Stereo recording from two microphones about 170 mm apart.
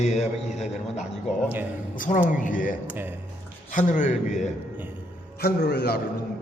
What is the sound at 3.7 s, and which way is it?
Speech, 50° left (ahead or behind).